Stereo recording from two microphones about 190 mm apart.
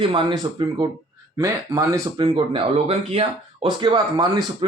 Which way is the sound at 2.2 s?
30° right (ahead or behind).